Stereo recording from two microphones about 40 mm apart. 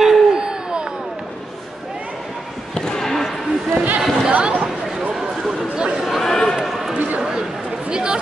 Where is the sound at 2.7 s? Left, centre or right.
Centre.